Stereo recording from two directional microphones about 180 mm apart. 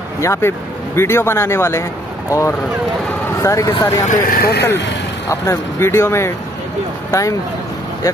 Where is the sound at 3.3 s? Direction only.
15° left (ahead or behind).